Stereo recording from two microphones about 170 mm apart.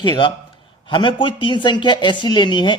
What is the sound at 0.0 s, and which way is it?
A woman's voice, 30° left (ahead or behind).